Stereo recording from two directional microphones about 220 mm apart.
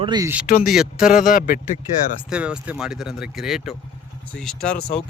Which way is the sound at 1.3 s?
40° left (ahead or behind).